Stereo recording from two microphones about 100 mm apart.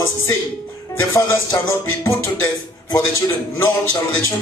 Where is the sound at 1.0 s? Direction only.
25° left (ahead or behind).